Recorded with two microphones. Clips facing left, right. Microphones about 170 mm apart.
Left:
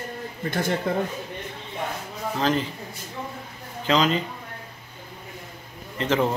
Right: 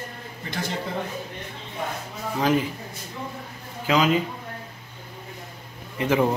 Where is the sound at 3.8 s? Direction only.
10° right (ahead or behind).